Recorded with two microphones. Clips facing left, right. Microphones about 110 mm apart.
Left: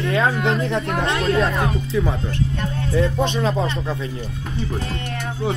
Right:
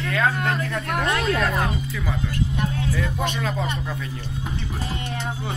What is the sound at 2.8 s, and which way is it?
Speech, 25° left (ahead or behind).